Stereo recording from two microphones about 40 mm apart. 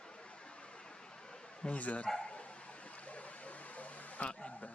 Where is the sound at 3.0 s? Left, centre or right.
Left.